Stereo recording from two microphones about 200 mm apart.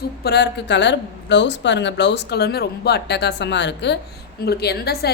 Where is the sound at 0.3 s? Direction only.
60° left (ahead or behind).